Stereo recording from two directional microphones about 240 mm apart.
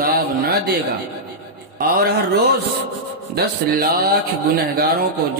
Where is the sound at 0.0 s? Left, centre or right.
Right.